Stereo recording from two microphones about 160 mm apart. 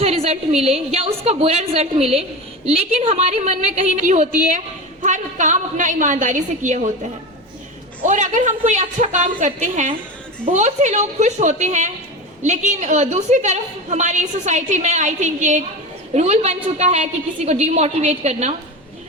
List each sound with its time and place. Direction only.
0.0 s a woman's voice: 40° right (ahead or behind)
8.0 s a woman's voice: 50° right (ahead or behind)